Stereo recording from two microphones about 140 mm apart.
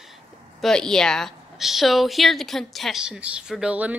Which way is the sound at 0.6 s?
5° left (ahead or behind).